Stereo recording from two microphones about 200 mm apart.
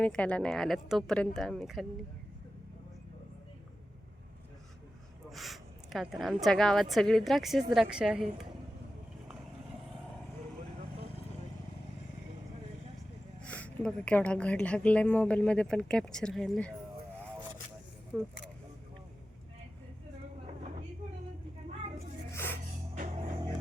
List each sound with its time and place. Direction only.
0.0 s speech: 5° left (ahead or behind)
5.3 s speech: centre (ahead or behind)
13.4 s speech: 5° left (ahead or behind)
18.1 s speech: centre (ahead or behind)
22.3 s music: 10° left (ahead or behind)
23.0 s music: 30° right (ahead or behind)